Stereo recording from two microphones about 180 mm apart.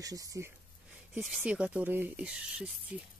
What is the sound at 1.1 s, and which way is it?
Speech, 5° right (ahead or behind).